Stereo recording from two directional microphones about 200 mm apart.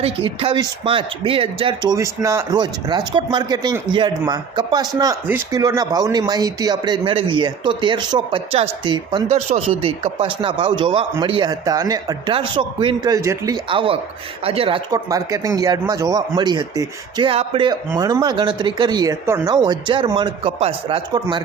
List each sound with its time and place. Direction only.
0.0 s speech: 25° right (ahead or behind)